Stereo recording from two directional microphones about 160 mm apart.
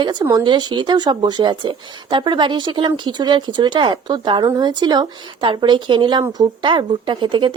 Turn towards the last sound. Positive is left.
turn(degrees=-30)  # may be behind; listen again after turning